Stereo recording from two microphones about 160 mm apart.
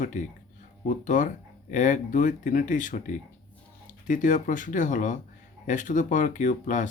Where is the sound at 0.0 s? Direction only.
50° left (ahead or behind).